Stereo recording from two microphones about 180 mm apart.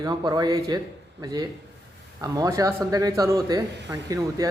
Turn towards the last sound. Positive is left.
turn(degrees=-20)  # may be behind; listen again after turning